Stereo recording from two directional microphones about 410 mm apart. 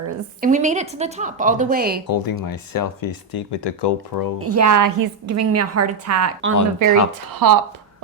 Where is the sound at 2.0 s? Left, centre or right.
Left.